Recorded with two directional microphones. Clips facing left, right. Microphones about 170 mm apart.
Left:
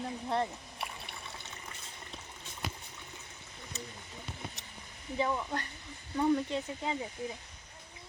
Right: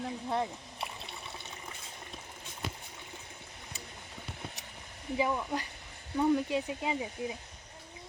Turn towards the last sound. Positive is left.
turn(degrees=-15)  # may be behind; listen again after turning